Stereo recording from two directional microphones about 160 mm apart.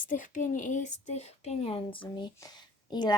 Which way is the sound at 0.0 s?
55° left (ahead or behind).